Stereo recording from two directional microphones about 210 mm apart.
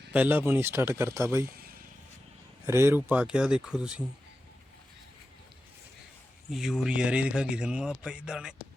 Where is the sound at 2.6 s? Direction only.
10° right (ahead or behind).